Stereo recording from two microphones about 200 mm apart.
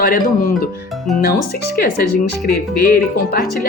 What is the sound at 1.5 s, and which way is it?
Speech, 50° left (ahead or behind).